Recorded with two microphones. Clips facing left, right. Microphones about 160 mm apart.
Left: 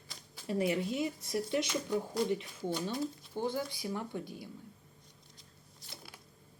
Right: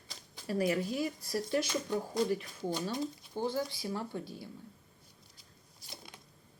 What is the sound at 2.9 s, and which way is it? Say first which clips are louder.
Speech: even; 20° right (ahead or behind).